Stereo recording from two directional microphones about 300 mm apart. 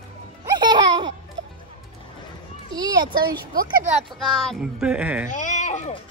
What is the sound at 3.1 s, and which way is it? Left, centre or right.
Speech, right.